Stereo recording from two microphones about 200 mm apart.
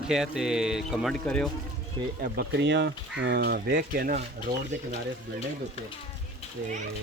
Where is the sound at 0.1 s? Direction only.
5° right (ahead or behind).